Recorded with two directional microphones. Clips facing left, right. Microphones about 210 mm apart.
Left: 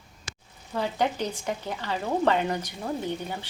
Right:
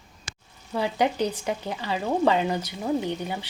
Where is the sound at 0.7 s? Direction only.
10° right (ahead or behind).